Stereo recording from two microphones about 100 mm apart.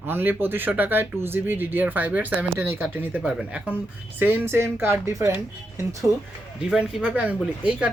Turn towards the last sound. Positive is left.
turn(degrees=-15)  # may be behind; listen again after turning